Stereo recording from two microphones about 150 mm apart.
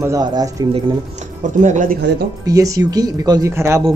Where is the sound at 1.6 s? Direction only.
60° right (ahead or behind).